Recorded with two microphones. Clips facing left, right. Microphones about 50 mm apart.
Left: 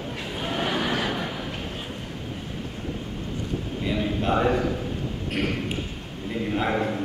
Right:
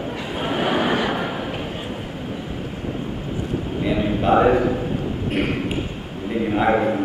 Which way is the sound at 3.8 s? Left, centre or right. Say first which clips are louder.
Right 6 dB; centre.